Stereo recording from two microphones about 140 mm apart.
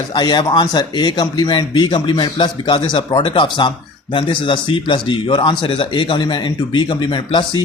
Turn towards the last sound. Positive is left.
turn(degrees=30)  # may be behind; listen again after turning